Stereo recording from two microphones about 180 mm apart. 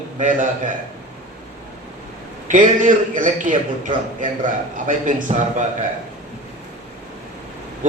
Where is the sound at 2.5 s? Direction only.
45° right (ahead or behind).